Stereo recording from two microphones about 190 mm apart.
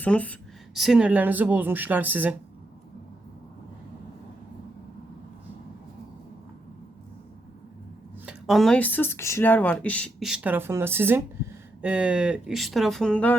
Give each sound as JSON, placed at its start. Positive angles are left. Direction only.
{"t": 0.0, "sound": "speech", "side_deg": 10}
{"t": 8.3, "sound": "speech", "side_deg": 0}